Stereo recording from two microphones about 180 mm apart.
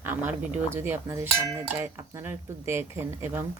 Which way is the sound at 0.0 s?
10° right (ahead or behind).